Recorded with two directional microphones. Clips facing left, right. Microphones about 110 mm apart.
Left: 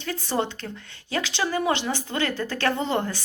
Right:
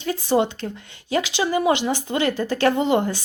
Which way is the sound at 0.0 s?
15° right (ahead or behind).